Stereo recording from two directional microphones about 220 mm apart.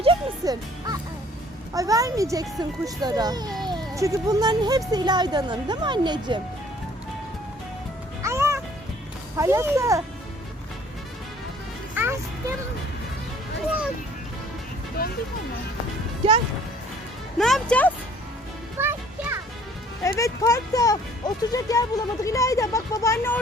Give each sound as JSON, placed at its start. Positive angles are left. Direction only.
{"t": 0.0, "sound": "music", "side_deg": -20}
{"t": 1.7, "sound": "a child's voice", "side_deg": -15}
{"t": 8.2, "sound": "music", "side_deg": -15}
{"t": 9.4, "sound": "a child's voice", "side_deg": -15}
{"t": 11.9, "sound": "music", "side_deg": -10}
{"t": 15.0, "sound": "speech", "side_deg": 45}
{"t": 17.3, "sound": "speech", "side_deg": 0}
{"t": 18.8, "sound": "music", "side_deg": -10}
{"t": 20.1, "sound": "speech", "side_deg": 15}